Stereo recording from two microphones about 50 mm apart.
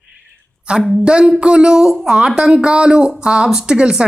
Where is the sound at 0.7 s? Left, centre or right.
Centre.